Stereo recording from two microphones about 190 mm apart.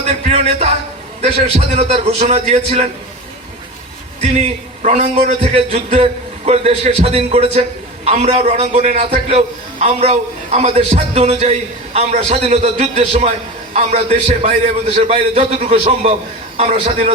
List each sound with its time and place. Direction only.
0.3 s a man's voice: 30° right (ahead or behind)
4.2 s a man's voice: 35° right (ahead or behind)